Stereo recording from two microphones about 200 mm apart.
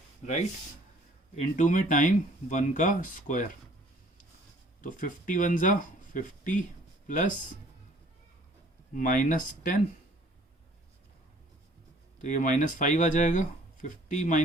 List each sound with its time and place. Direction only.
0.2 s speech: 35° left (ahead or behind)
1.4 s speech: 40° left (ahead or behind)
4.8 s speech: 40° left (ahead or behind)
9.0 s speech: 40° left (ahead or behind)
12.2 s speech: 40° left (ahead or behind)